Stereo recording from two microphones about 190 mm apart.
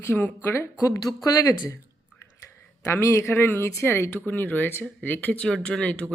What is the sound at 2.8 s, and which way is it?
Speech, 15° left (ahead or behind).